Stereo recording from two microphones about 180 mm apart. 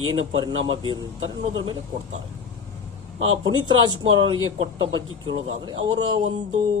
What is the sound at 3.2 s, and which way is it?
Speech, 25° right (ahead or behind).